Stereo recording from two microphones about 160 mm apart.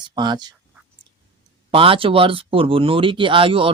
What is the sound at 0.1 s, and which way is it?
Speech, 25° right (ahead or behind).